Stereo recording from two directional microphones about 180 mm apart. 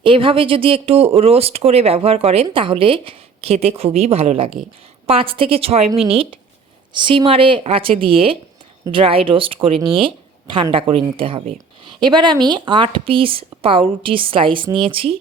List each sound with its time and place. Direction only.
0.0 s speech: 30° right (ahead or behind)